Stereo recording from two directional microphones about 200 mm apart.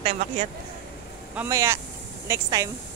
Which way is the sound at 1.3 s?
10° right (ahead or behind).